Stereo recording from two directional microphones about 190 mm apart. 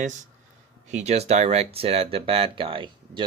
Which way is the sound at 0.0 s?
40° right (ahead or behind).